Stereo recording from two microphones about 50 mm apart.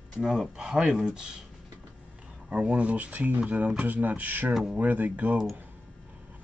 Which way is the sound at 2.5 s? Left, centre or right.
Right.